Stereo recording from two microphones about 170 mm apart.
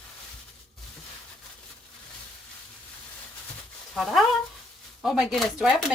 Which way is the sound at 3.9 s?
Centre (ahead or behind).